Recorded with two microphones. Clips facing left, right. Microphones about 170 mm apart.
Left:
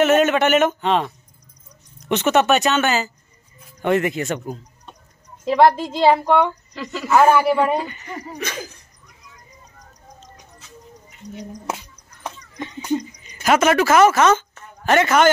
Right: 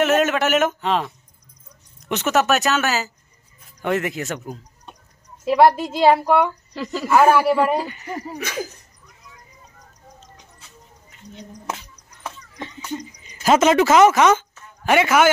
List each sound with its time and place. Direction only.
0.0 s speech: centre (ahead or behind)
11.2 s speech: 40° left (ahead or behind)
12.2 s a sound: 15° left (ahead or behind)
13.4 s a man's voice: 25° right (ahead or behind)